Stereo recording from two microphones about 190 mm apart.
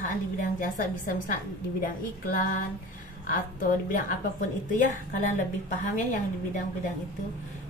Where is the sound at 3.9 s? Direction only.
40° left (ahead or behind).